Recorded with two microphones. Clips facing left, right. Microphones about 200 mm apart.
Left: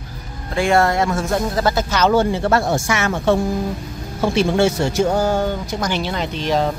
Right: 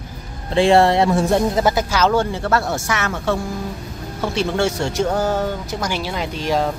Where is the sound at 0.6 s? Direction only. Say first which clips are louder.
Right 3 dB; 30° right (ahead or behind); by 2.0 s 10° right (ahead or behind).